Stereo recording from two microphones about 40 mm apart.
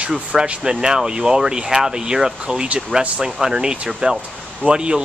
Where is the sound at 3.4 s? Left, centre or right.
Centre.